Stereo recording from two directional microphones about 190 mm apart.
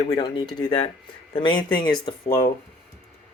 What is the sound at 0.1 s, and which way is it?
Speech, 25° left (ahead or behind).